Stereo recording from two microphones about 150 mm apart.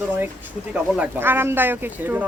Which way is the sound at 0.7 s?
10° right (ahead or behind).